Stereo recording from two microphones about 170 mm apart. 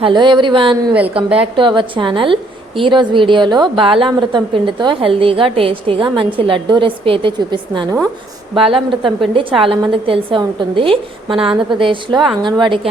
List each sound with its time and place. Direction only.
0.0 s a woman's voice: 25° right (ahead or behind)